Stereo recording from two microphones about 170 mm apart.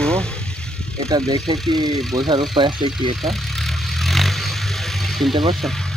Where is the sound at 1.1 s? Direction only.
25° right (ahead or behind).